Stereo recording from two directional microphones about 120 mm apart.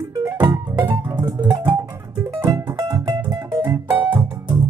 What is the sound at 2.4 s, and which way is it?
Music, 30° right (ahead or behind).